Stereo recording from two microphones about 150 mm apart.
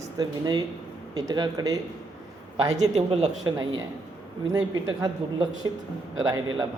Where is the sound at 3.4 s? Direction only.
25° right (ahead or behind).